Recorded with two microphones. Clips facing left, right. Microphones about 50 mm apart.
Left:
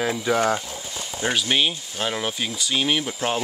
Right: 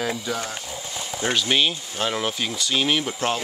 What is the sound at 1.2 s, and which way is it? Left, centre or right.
Speech, centre.